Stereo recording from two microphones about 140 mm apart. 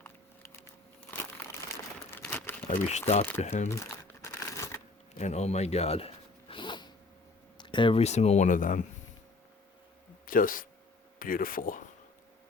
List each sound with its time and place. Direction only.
2.0 s crumpling: 15° left (ahead or behind)
2.6 s speech: 60° left (ahead or behind)
3.7 s crumpling: 20° left (ahead or behind)
5.1 s zipper: 50° left (ahead or behind); by 6.9 s 35° left (ahead or behind)
7.6 s speech: 35° left (ahead or behind); by 8.8 s 70° left (ahead or behind)
10.2 s speech: 80° left
11.2 s speech: 90° left